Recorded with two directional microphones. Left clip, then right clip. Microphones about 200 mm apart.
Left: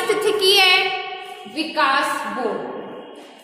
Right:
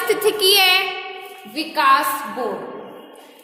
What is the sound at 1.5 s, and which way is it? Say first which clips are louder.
Music: right 3 dB; 55° right (ahead or behind).